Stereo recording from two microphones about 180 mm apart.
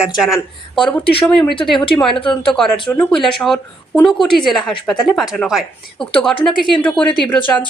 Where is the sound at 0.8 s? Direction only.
5° left (ahead or behind).